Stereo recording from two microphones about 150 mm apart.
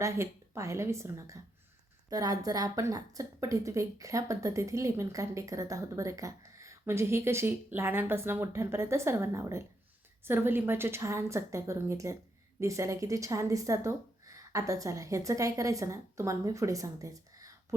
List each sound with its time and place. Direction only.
0.0 s a woman's voice: 20° right (ahead or behind)